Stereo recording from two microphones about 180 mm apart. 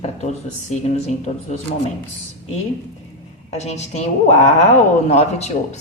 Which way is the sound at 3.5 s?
40° left (ahead or behind).